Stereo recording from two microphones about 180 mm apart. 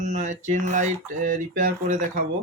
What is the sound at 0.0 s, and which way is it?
Speech, 45° right (ahead or behind).